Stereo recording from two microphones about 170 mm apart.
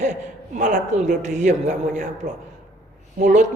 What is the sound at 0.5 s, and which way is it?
A man's voice, 45° right (ahead or behind).